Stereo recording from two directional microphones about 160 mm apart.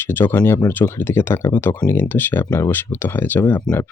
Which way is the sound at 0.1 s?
15° left (ahead or behind).